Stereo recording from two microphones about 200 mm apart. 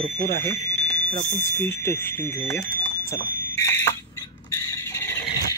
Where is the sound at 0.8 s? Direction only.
5° left (ahead or behind).